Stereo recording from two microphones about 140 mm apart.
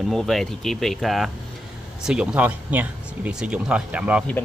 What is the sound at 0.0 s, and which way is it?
Speech, centre (ahead or behind).